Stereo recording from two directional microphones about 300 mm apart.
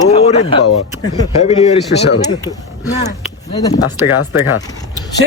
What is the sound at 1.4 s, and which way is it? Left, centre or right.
Speech, left.